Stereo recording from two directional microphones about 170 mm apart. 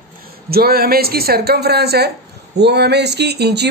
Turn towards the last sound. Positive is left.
turn(degrees=-75)  # may be behind; listen again after turning